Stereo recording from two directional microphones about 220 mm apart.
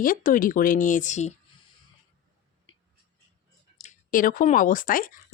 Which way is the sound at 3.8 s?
40° left (ahead or behind).